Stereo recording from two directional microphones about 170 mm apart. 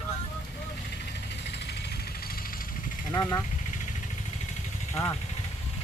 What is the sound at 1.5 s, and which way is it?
Vehicle, 80° left.